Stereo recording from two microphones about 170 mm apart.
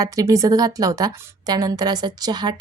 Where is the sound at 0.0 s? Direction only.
20° right (ahead or behind).